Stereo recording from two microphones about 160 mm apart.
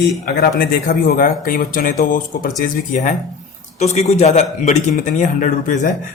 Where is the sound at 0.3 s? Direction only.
70° left (ahead or behind); by 2.5 s 55° left (ahead or behind).